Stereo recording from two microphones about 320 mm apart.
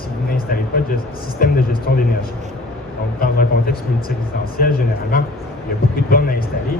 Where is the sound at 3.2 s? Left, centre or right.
Left.